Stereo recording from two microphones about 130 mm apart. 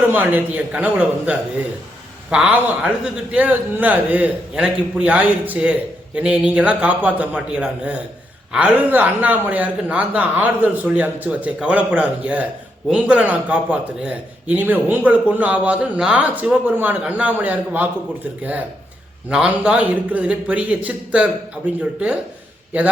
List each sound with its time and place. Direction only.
0.1 s a man's voice: 15° right (ahead or behind)
19.3 s a man's voice: 5° right (ahead or behind)
22.7 s a man's voice: 10° right (ahead or behind)